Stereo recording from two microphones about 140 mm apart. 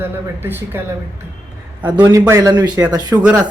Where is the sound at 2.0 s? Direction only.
25° right (ahead or behind).